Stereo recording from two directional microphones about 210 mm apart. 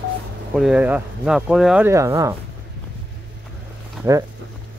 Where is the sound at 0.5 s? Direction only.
5° right (ahead or behind).